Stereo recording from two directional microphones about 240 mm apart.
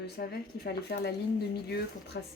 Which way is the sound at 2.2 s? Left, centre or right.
Left.